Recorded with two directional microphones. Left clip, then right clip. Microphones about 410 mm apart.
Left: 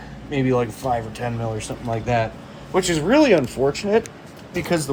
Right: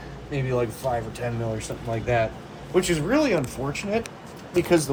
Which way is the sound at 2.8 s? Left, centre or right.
Left.